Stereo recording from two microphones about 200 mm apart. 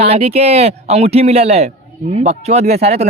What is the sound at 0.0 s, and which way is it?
Speech, 30° right (ahead or behind).